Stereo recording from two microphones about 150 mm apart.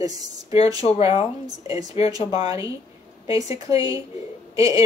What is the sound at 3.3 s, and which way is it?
Speech, 25° right (ahead or behind).